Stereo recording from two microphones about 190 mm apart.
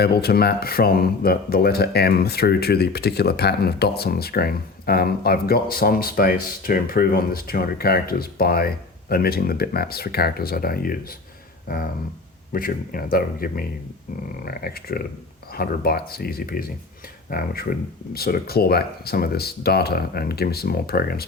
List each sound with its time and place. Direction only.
0.0 s speech: 55° left (ahead or behind)